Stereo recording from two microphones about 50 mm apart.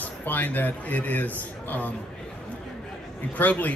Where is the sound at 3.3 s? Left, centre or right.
Left.